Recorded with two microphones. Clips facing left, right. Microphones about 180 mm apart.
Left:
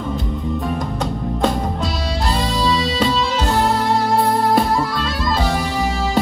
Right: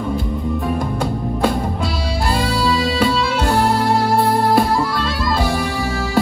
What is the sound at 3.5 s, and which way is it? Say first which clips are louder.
Music: right 1 dB; centre (ahead or behind).